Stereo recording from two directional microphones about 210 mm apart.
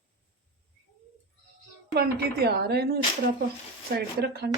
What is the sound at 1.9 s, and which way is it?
Speech, 50° right (ahead or behind).